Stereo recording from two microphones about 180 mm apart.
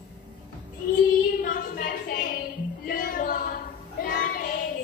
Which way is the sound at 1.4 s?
50° left (ahead or behind).